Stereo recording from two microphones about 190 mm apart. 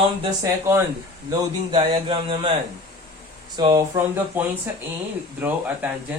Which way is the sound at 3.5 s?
20° right (ahead or behind).